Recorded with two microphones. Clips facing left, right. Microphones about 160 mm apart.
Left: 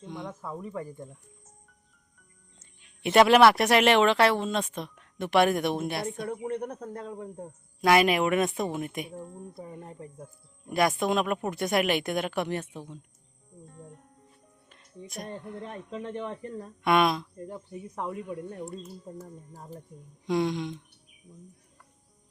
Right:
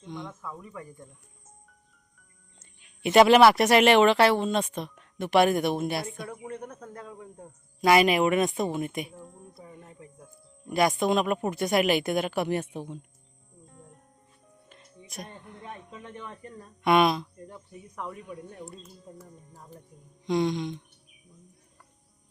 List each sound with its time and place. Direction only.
0.3 s speech: 35° left (ahead or behind)
2.8 s speech: centre (ahead or behind)
6.3 s speech: 35° left (ahead or behind)
7.8 s speech: centre (ahead or behind)
9.1 s speech: 30° left (ahead or behind)
10.7 s speech: centre (ahead or behind); by 13.0 s 15° right (ahead or behind)
14.7 s speech: centre (ahead or behind)
15.9 s speech: 35° left (ahead or behind)
16.8 s speech: centre (ahead or behind)
17.3 s speech: 30° left (ahead or behind)
19.2 s speech: 40° left (ahead or behind)
20.2 s speech: 5° left (ahead or behind)